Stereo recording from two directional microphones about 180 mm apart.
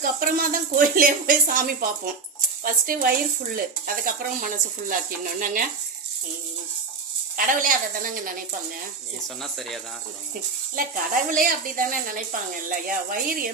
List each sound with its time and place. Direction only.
0.0 s speech: 50° right (ahead or behind)
7.3 s speech: 50° right (ahead or behind)
9.2 s speech: centre (ahead or behind)
10.8 s speech: 50° right (ahead or behind)